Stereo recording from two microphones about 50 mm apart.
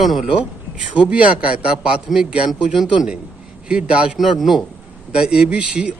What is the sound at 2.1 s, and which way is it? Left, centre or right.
Speech, centre.